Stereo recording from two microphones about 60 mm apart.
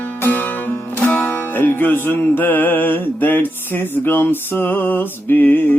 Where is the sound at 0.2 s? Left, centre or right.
Left.